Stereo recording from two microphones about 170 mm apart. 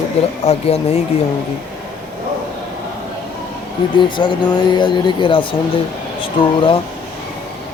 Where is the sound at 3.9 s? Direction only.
25° left (ahead or behind).